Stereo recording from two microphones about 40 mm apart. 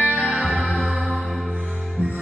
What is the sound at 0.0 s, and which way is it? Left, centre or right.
Music, left.